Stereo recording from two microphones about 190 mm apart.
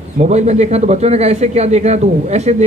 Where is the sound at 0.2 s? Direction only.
35° right (ahead or behind).